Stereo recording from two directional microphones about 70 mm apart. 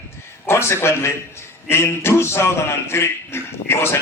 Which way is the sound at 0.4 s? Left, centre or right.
Left.